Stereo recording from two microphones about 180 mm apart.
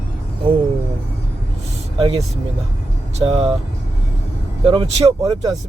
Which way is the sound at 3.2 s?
30° right (ahead or behind).